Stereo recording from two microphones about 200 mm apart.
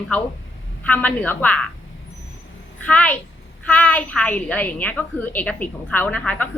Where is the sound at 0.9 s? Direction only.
10° left (ahead or behind).